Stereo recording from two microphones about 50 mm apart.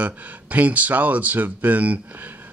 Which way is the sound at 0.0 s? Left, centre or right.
Right.